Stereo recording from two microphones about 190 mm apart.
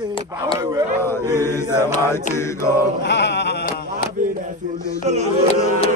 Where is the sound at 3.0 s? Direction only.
65° left (ahead or behind).